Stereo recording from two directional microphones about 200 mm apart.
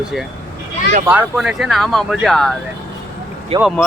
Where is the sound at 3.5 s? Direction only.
30° right (ahead or behind).